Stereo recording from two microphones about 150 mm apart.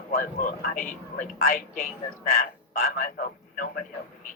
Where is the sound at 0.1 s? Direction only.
70° left (ahead or behind).